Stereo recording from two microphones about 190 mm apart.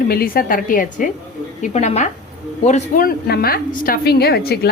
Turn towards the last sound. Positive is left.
turn(degrees=55)  # may be behind; listen again after turning